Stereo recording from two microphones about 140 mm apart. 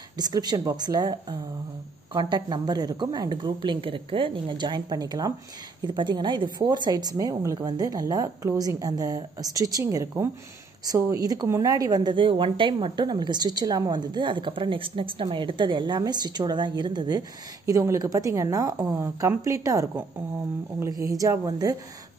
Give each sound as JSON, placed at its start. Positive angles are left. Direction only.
{"t": 0.2, "sound": "a woman's voice", "side_deg": -30}